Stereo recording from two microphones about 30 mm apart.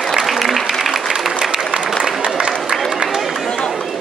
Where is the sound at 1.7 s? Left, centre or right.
Right.